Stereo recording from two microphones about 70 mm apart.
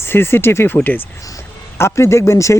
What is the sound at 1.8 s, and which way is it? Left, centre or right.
Speech, left.